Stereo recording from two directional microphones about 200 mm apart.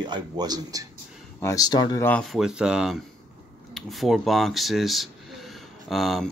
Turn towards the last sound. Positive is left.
turn(degrees=0)  # may be behind; listen again after turning